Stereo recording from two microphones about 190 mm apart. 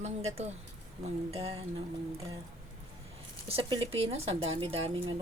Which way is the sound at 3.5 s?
25° right (ahead or behind).